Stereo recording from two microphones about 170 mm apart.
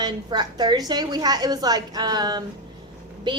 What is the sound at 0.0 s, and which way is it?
Speech, 25° right (ahead or behind).